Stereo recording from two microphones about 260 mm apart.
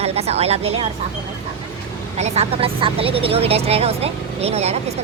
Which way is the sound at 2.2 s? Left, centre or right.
Right.